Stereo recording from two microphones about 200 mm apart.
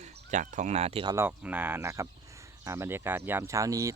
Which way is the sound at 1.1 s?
10° right (ahead or behind).